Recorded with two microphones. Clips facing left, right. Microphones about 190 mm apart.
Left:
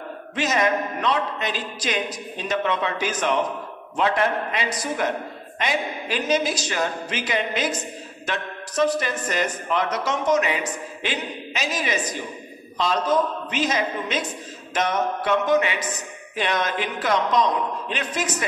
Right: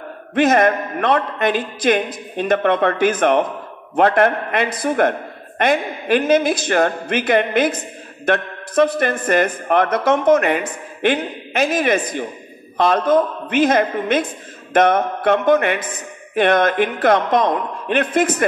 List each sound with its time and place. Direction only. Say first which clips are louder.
0.3 s a woman's voice: right 8 dB; 55° right (ahead or behind)